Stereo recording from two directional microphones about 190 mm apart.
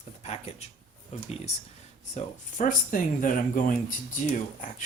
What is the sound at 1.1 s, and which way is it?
Speech, 35° left (ahead or behind).